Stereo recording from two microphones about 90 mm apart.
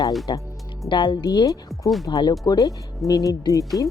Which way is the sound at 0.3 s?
55° left (ahead or behind).